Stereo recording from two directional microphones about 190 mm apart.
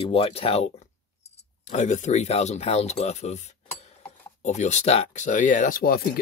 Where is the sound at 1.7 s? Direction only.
40° left (ahead or behind).